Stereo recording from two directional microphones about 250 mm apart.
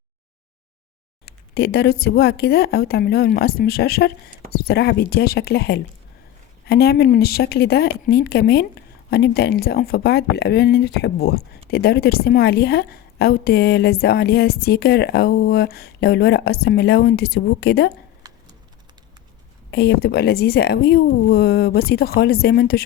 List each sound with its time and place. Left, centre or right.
1.5 s a woman's voice: left
19.7 s a woman's voice: left